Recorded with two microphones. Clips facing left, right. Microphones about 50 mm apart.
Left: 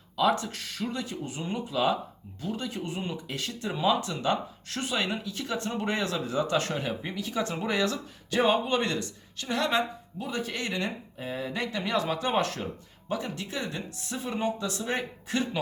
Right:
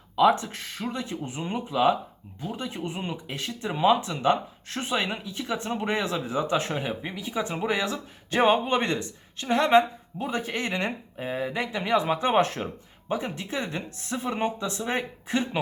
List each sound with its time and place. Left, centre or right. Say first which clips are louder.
0.2 s speech: right 5 dB; right
8.3 s speech: right 3 dB; right